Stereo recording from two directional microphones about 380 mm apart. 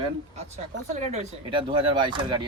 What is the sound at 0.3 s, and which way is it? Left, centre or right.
Speech, centre.